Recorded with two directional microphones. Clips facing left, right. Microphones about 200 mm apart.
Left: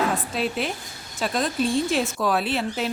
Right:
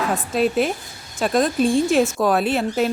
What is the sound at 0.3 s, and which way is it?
A woman's voice, 45° right (ahead or behind).